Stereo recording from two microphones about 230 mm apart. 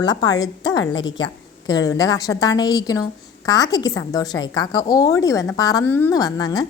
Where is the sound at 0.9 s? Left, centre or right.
Left.